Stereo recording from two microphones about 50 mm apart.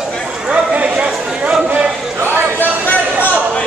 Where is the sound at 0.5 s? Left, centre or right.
Right.